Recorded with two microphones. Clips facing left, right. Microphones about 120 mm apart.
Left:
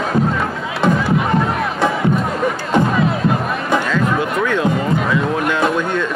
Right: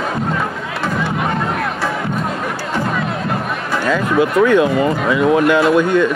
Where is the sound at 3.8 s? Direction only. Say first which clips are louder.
Right 3 dB; 5° right (ahead or behind).